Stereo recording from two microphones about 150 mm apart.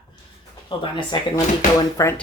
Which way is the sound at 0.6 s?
35° left (ahead or behind).